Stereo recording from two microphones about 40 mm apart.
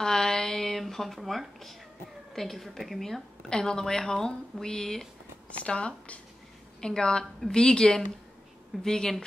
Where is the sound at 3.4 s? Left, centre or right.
Centre.